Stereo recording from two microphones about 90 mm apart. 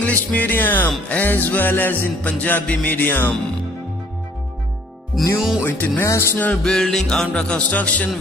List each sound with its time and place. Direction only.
0.0 s music: 15° left (ahead or behind)
5.2 s music: centre (ahead or behind)
5.6 s music: 25° left (ahead or behind)